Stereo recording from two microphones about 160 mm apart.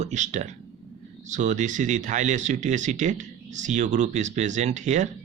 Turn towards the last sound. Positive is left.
turn(degrees=-50)  # may be behind; listen again after turning